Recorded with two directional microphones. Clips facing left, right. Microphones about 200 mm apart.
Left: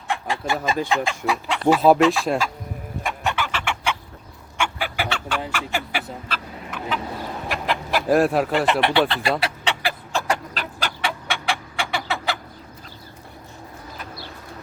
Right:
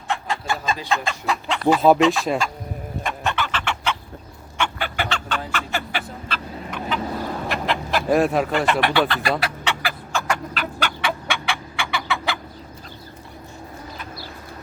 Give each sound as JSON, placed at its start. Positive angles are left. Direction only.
{"t": 0.1, "sound": "chicken", "side_deg": 15}
{"t": 0.9, "sound": "speech", "side_deg": 15}
{"t": 3.0, "sound": "chicken", "side_deg": 10}
{"t": 4.5, "sound": "fowl", "side_deg": 10}
{"t": 7.4, "sound": "chicken", "side_deg": 10}
{"t": 8.5, "sound": "speech", "side_deg": 20}
{"t": 9.4, "sound": "chicken", "side_deg": 30}